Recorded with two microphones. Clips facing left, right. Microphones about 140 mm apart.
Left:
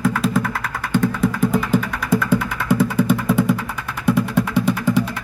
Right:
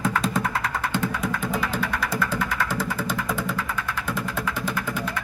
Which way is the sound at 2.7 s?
60° left (ahead or behind).